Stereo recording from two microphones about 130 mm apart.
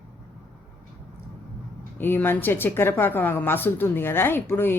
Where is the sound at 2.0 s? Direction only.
15° left (ahead or behind).